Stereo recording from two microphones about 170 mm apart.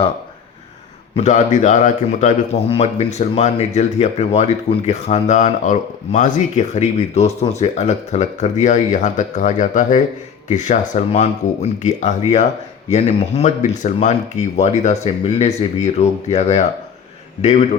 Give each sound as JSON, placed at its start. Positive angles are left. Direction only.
{"t": 1.1, "sound": "a man's voice", "side_deg": 45}